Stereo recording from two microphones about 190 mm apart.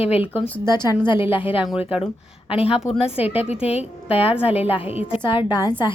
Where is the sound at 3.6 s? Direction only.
30° left (ahead or behind).